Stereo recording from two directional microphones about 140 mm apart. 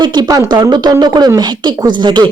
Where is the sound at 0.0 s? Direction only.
30° right (ahead or behind).